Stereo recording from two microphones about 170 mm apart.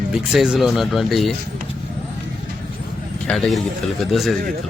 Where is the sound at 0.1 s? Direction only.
5° right (ahead or behind).